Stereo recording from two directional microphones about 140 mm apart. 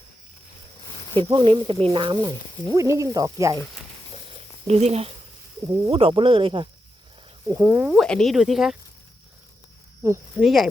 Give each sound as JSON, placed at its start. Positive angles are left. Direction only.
{"t": 1.2, "sound": "speech", "side_deg": -35}
{"t": 4.6, "sound": "speech", "side_deg": -50}
{"t": 7.4, "sound": "speech", "side_deg": -25}
{"t": 7.9, "sound": "speech", "side_deg": 5}
{"t": 10.4, "sound": "speech", "side_deg": 0}